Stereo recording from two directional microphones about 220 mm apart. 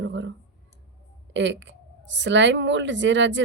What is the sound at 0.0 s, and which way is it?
Clicking, 55° right (ahead or behind).